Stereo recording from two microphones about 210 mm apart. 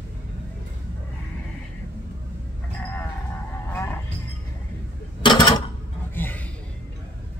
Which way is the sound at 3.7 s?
10° left (ahead or behind).